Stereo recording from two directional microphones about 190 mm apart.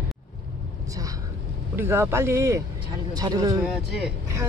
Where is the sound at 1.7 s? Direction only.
10° right (ahead or behind).